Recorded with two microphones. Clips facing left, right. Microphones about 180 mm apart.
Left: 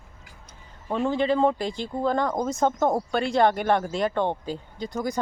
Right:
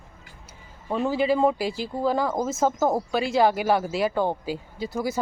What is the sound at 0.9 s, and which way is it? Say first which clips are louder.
Speech: right 1 dB; 5° right (ahead or behind).